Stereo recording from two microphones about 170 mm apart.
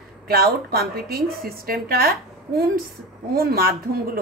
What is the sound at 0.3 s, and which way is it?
A man's voice, 65° right (ahead or behind).